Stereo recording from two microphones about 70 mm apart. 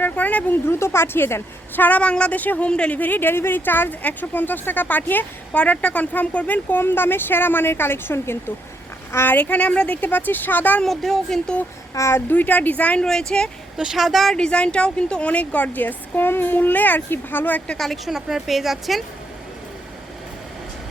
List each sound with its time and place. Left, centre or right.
0.0 s speech: left
0.7 s a woman's voice: left
10.8 s a woman's voice: centre
11.9 s speech: left
12.3 s a woman's voice: left
13.1 s speech: centre
13.7 s a woman's voice: centre
14.3 s a woman's voice: centre
17.7 s a woman's voice: centre